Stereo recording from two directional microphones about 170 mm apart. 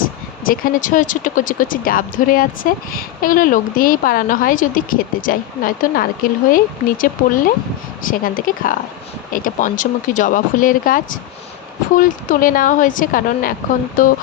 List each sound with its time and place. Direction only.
0.0 s speech: 55° left (ahead or behind)